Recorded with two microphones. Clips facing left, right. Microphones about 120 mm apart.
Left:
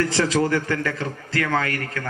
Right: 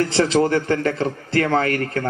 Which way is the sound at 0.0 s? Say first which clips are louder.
Right 3 dB; 20° right (ahead or behind).